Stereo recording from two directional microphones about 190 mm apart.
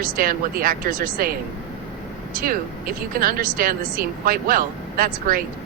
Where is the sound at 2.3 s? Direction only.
50° right (ahead or behind).